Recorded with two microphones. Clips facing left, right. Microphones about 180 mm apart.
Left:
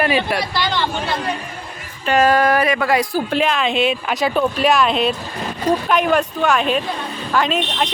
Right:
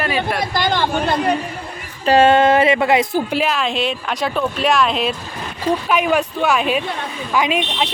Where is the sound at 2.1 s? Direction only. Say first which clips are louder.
Right 3 dB; 25° right (ahead or behind).